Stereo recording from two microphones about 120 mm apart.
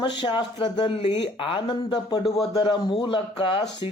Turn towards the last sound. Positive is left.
turn(degrees=50)  # may be behind; listen again after turning